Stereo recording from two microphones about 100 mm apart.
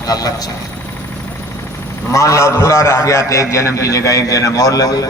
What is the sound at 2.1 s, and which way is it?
A man's voice, 30° left (ahead or behind).